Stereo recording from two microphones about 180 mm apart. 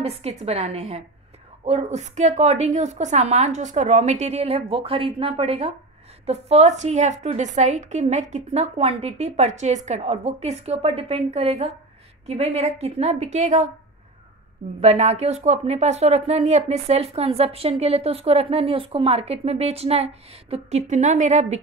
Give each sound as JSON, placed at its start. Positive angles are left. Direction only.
{"t": 0.0, "sound": "speech", "side_deg": -35}
{"t": 14.8, "sound": "speech", "side_deg": -35}